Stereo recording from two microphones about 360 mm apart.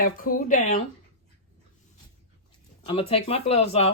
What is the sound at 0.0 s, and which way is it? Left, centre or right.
Speech, left.